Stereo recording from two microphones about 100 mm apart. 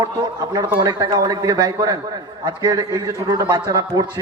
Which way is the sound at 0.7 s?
40° right (ahead or behind).